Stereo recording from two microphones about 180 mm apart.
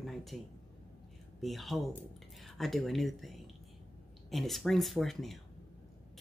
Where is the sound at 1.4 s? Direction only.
Centre (ahead or behind).